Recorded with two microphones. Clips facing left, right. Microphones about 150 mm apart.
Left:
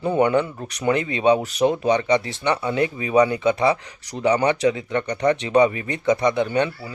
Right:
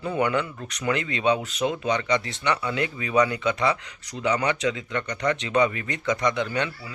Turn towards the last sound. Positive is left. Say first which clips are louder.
# left 5 dB
turn(degrees=20)  # may be behind; listen again after turning